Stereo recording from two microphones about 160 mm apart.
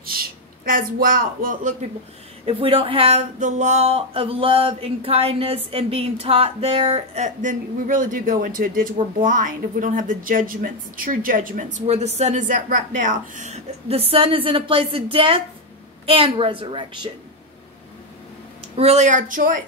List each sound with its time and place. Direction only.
0.0 s speech: 65° right (ahead or behind)
2.4 s a woman's voice: 35° right (ahead or behind)
18.8 s a woman's voice: 45° right (ahead or behind)